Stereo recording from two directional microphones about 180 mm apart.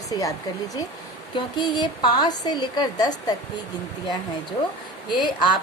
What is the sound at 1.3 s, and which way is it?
A woman's voice, 25° left (ahead or behind).